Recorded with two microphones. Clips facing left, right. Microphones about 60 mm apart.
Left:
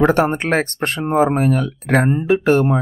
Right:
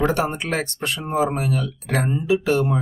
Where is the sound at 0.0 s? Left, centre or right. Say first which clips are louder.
Left 6 dB; left.